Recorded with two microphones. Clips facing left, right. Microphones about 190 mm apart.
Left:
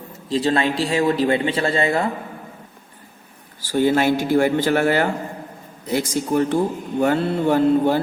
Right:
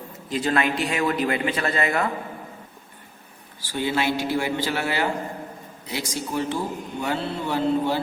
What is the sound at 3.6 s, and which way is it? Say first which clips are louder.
Speech: left 7 dB; 45° left (ahead or behind).